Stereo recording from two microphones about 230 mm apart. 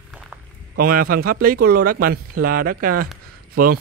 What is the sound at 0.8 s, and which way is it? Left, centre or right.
Speech, right.